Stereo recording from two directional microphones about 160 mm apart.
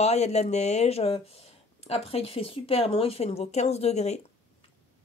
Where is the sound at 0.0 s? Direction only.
40° left (ahead or behind).